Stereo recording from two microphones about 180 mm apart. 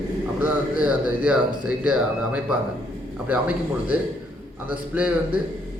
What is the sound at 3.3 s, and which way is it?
A man's voice, 10° right (ahead or behind).